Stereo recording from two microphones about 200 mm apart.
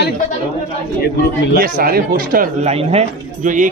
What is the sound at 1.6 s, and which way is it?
Speech, 45° right (ahead or behind).